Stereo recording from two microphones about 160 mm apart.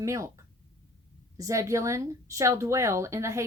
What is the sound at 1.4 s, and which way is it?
A woman's voice, 20° right (ahead or behind).